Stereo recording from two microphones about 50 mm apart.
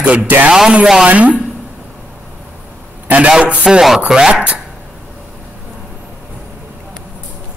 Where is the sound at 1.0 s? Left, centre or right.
Right.